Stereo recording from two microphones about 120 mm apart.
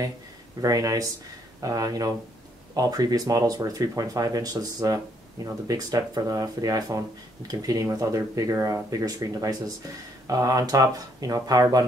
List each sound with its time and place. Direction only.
0.6 s speech: 30° right (ahead or behind)